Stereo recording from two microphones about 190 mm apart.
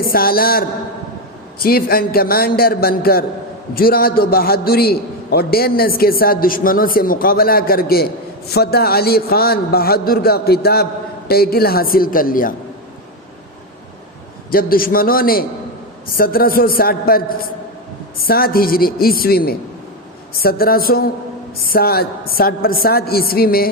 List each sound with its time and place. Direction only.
0.0 s a man's voice: 50° left (ahead or behind)
14.5 s a man's voice: 50° left (ahead or behind)